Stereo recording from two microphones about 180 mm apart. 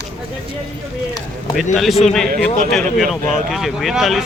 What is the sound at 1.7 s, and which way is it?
Speech, centre (ahead or behind).